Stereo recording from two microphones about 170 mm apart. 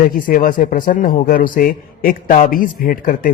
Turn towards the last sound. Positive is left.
turn(degrees=55)  # may be behind; listen again after turning